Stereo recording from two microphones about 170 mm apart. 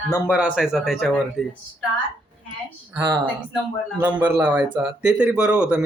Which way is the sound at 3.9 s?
10° right (ahead or behind).